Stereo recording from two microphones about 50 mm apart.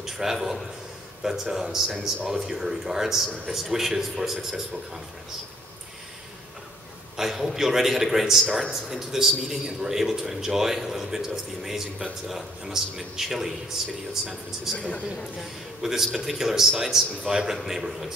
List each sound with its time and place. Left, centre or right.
0.0 s a man's voice: centre
7.2 s a man's voice: centre
14.8 s a man's voice: left
15.8 s a man's voice: centre